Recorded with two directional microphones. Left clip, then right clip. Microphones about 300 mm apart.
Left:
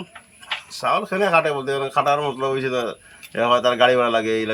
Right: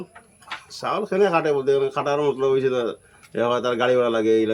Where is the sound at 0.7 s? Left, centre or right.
Centre.